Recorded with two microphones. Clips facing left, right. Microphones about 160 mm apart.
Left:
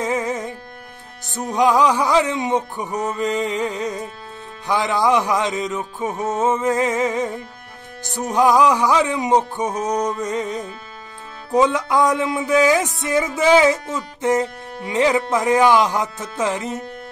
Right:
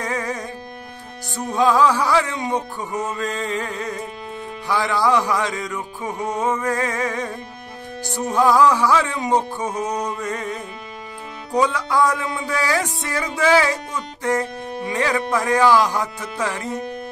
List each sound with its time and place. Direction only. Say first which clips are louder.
0.0 s music: left 4 dB; 20° left (ahead or behind)